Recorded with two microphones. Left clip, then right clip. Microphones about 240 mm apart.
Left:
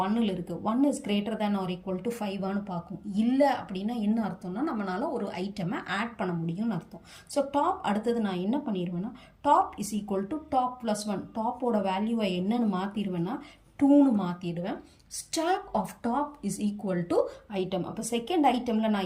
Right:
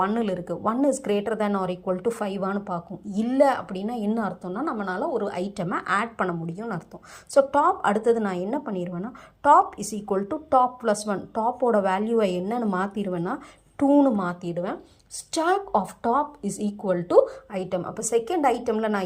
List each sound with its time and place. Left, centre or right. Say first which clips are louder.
0.6 s speech: right 4 dB; centre